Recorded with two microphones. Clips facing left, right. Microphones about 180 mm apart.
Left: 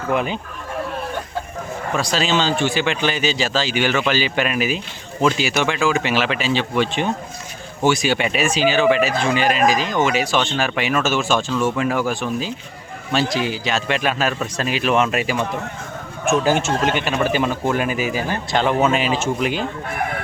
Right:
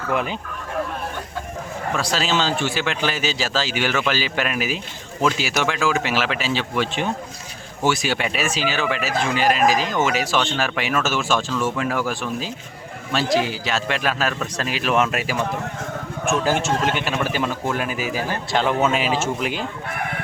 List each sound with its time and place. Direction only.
0.1 s speech: centre (ahead or behind)
2.0 s speech: 5° right (ahead or behind)
16.4 s speech: centre (ahead or behind)